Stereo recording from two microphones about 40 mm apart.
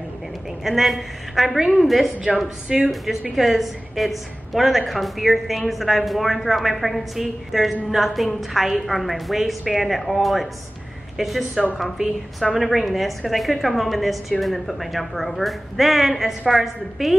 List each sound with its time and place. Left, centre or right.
0.7 s a woman's voice: centre
2.3 s a woman's voice: right
2.7 s speech: centre
3.1 s a woman's voice: centre